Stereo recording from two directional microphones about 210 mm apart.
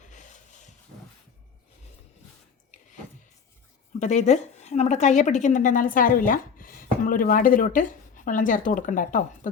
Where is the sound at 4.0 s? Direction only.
35° left (ahead or behind).